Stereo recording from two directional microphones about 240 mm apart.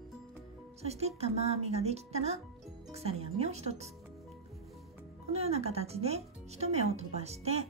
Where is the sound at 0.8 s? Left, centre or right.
Right.